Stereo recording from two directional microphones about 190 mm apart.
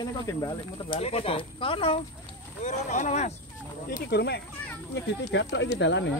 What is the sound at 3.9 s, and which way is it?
Speech, 60° left (ahead or behind).